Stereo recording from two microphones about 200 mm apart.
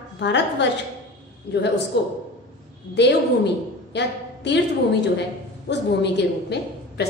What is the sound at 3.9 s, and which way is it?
Speech, 60° left (ahead or behind).